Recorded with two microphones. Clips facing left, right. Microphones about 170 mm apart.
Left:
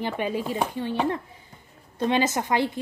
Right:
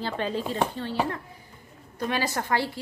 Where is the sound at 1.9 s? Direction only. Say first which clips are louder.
Left 5 dB; 20° left (ahead or behind).